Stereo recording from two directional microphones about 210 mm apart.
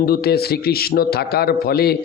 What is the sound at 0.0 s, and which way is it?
Mantra, 45° left (ahead or behind).